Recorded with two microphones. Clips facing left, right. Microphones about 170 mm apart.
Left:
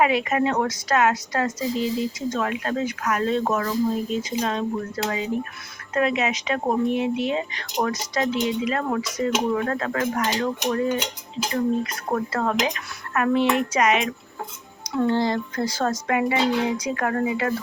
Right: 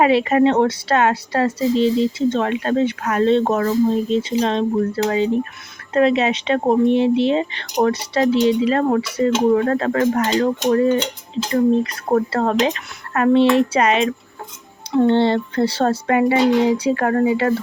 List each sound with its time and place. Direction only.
0.0 s a woman's voice: 30° right (ahead or behind)
12.0 s a woman's voice: 35° right (ahead or behind)